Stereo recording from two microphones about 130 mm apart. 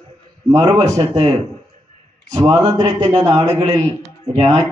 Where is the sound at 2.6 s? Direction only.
25° right (ahead or behind).